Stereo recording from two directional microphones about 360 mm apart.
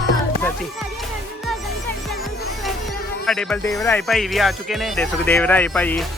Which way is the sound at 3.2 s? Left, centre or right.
Centre.